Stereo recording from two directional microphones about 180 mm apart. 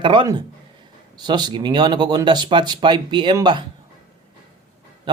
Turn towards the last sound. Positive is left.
turn(degrees=-25)  # may be behind; listen again after turning